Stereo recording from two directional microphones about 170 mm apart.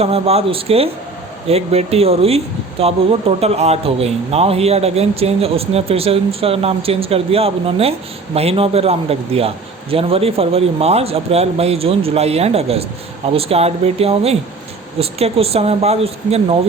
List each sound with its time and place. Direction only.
0.0 s speech: 35° right (ahead or behind)